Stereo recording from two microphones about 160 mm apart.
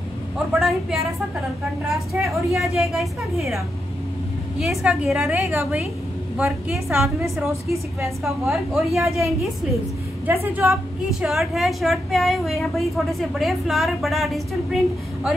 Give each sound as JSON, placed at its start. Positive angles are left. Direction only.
{"t": 0.6, "sound": "a woman's voice", "side_deg": 0}
{"t": 5.3, "sound": "a woman's voice", "side_deg": -15}
{"t": 8.2, "sound": "a woman's voice", "side_deg": 0}
{"t": 10.2, "sound": "a woman's voice", "side_deg": -15}
{"t": 11.1, "sound": "a woman's voice", "side_deg": 0}